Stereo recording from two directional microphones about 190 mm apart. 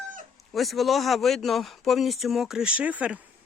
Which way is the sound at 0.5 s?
Centre (ahead or behind).